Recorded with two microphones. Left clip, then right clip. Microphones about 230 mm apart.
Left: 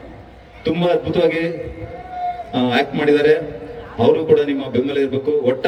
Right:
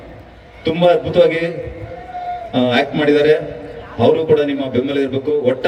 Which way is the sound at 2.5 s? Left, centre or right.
Left.